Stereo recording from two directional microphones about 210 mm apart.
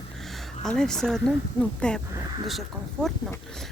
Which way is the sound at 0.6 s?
5° left (ahead or behind).